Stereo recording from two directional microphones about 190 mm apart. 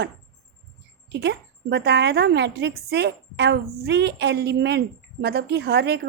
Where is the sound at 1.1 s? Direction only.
60° right (ahead or behind).